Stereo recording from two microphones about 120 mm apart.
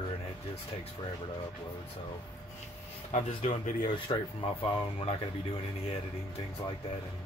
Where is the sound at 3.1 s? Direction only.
75° left (ahead or behind).